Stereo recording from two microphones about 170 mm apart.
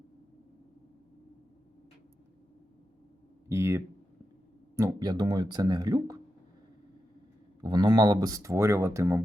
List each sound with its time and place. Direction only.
3.5 s speech: 15° right (ahead or behind)
7.6 s speech: 25° right (ahead or behind)